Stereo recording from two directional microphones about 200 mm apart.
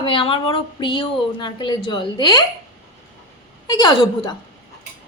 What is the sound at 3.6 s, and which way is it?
Speech, 20° left (ahead or behind).